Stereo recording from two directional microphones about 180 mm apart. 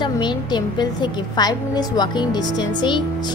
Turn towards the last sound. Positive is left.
turn(degrees=25)  # may be behind; listen again after turning